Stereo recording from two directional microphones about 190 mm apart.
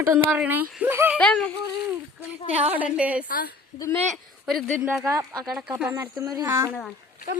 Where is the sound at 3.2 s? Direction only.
50° left (ahead or behind).